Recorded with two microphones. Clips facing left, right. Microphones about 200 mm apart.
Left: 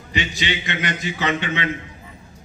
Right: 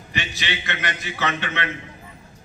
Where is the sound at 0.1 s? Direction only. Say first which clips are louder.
Left 5 dB; 15° left (ahead or behind).